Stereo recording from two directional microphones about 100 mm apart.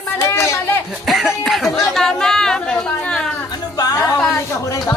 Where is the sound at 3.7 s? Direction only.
40° left (ahead or behind).